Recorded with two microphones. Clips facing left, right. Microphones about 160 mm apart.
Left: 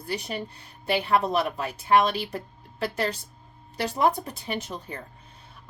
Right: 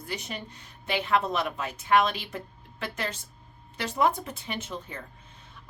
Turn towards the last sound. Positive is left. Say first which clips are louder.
# left 3 dB
turn(degrees=35)  # may be behind; listen again after turning